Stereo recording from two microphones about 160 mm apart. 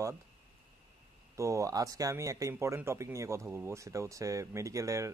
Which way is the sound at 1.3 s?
20° right (ahead or behind).